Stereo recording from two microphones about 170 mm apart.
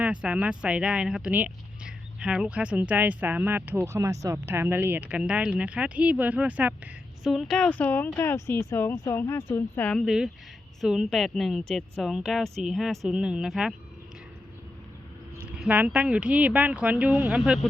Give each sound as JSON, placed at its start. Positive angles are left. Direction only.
{"t": 0.0, "sound": "a woman's voice", "side_deg": -5}
{"t": 15.5, "sound": "speech", "side_deg": -5}